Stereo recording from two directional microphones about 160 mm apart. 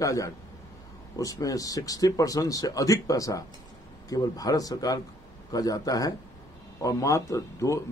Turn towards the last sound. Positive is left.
turn(degrees=20)  # may be behind; listen again after turning